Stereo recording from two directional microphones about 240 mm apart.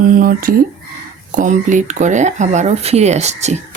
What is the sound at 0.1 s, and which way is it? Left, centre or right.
Speech, right.